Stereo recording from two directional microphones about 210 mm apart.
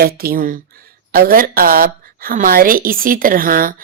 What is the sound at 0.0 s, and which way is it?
A woman's voice, 45° right (ahead or behind).